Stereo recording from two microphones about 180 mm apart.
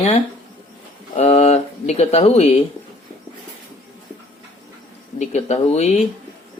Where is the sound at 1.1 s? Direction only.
35° left (ahead or behind).